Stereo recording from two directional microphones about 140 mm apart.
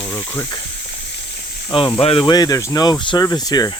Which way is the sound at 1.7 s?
35° left (ahead or behind).